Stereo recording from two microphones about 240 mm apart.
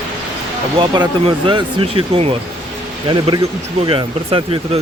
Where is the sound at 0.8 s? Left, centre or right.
Centre.